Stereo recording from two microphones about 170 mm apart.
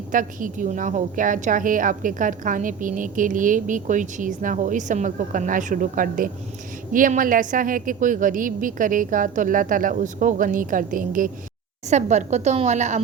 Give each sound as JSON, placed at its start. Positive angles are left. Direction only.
{"t": 0.1, "sound": "a woman's voice", "side_deg": -50}